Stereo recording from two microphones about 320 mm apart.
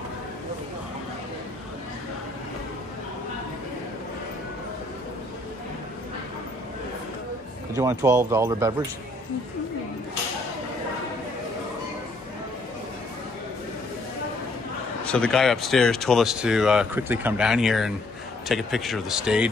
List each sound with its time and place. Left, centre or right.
7.7 s speech: centre
15.0 s speech: centre